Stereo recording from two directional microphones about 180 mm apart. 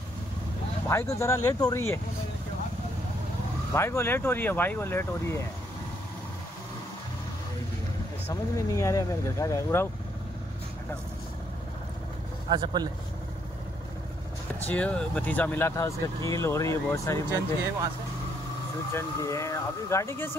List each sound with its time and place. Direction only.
0.8 s speech: 15° left (ahead or behind)
3.7 s speech: 15° left (ahead or behind)
8.3 s speech: 15° left (ahead or behind)
12.4 s speech: 25° right (ahead or behind)
14.7 s speech: 5° left (ahead or behind)
18.9 s speech: 15° left (ahead or behind)